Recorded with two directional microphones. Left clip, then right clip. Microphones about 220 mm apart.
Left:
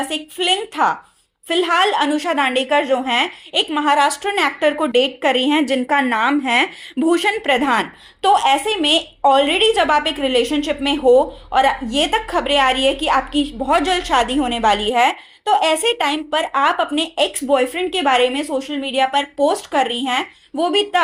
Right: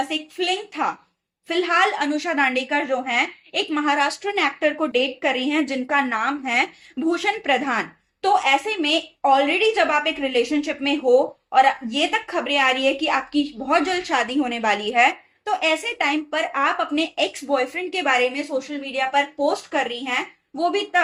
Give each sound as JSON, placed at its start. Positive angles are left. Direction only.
{"t": 0.1, "sound": "a woman's voice", "side_deg": 40}